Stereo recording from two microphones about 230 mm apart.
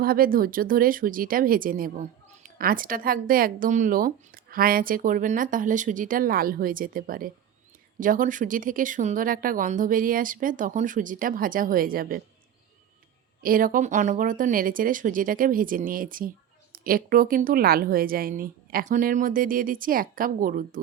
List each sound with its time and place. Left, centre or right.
0.0 s speech: right
13.4 s speech: right